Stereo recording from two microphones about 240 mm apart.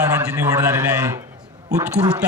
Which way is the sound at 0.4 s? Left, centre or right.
Centre.